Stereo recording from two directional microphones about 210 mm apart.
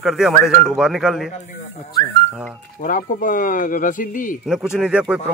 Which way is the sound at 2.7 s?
40° left (ahead or behind).